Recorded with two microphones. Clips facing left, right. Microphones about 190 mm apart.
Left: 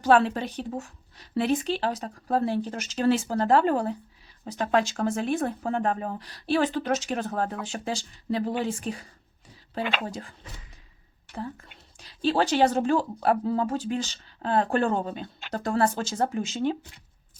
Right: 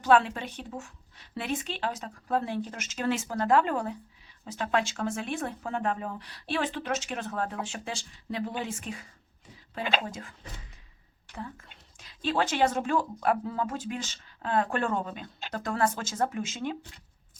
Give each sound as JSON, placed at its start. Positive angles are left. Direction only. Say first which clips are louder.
{"t": 0.0, "sound": "speech", "louder": "left 3 dB", "side_deg": 35}
{"t": 10.1, "sound": "speech", "louder": "left 4 dB", "side_deg": 35}
{"t": 11.3, "sound": "speech", "louder": "left 5 dB", "side_deg": 35}